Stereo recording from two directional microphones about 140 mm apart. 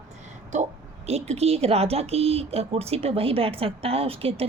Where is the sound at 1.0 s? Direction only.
50° right (ahead or behind).